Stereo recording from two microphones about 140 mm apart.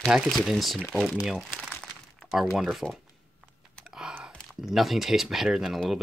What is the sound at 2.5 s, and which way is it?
Speech, centre (ahead or behind).